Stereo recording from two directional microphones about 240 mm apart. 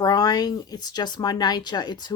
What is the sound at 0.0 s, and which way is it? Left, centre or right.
Speech, centre.